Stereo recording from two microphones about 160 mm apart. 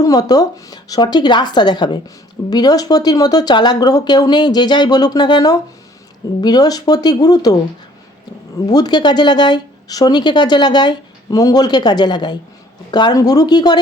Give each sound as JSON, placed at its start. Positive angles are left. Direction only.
{"t": 0.0, "sound": "speech", "side_deg": 25}
{"t": 8.6, "sound": "speech", "side_deg": 25}